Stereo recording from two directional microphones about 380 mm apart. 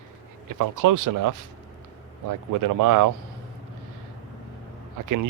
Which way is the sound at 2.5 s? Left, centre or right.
Right.